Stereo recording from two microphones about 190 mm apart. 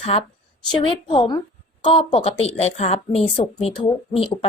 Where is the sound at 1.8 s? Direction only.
30° left (ahead or behind).